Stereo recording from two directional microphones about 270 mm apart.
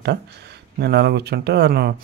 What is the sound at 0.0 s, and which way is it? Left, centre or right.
Speech, right.